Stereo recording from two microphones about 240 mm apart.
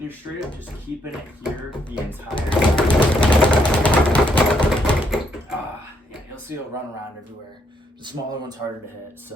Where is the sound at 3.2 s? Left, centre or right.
Centre.